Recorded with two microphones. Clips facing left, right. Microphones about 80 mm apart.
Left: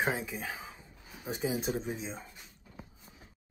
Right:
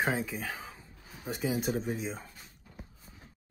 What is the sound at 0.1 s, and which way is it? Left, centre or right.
Speech, centre.